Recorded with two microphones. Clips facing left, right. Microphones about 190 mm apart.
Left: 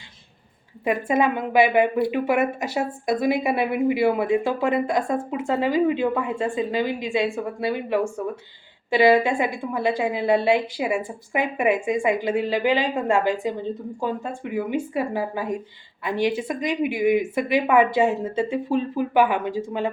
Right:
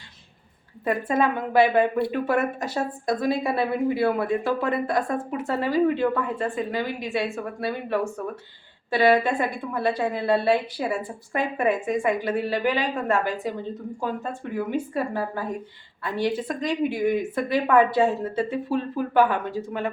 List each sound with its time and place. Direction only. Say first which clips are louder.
0.9 s a woman's voice: left 2 dB; 10° left (ahead or behind)